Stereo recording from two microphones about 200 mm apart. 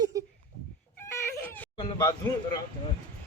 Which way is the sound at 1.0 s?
15° left (ahead or behind).